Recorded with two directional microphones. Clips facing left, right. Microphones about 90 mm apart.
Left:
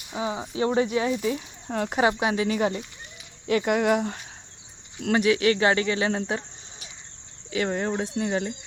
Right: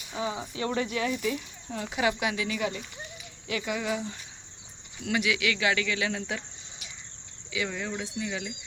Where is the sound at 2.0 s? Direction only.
35° left (ahead or behind).